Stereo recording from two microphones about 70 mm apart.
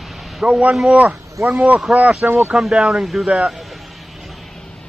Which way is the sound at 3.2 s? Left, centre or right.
Centre.